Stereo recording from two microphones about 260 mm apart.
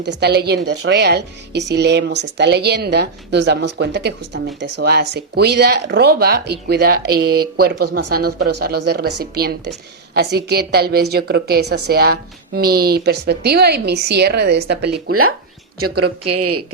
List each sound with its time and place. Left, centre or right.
0.0 s speech: right
8.1 s speech: right
8.6 s speech: right
14.8 s speech: right